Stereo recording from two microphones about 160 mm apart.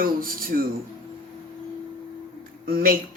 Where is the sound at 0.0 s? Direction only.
65° right (ahead or behind).